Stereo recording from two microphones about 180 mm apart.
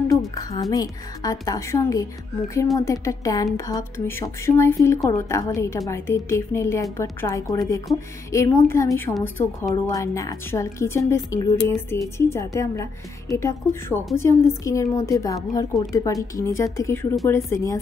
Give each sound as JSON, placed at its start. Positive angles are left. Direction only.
{"t": 0.3, "sound": "a woman's voice", "side_deg": 20}